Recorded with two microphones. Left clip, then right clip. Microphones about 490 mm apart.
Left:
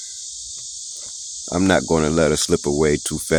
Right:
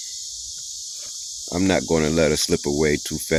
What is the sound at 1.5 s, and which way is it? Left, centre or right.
Speech, right.